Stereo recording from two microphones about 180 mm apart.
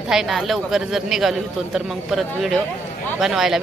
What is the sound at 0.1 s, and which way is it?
Speech, centre (ahead or behind).